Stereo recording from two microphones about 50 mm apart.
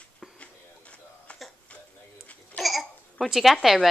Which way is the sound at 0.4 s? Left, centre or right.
Left.